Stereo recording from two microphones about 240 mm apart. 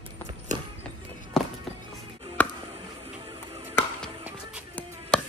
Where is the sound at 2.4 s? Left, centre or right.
Centre.